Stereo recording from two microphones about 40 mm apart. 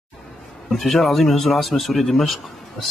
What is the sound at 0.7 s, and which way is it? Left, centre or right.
Speech, centre.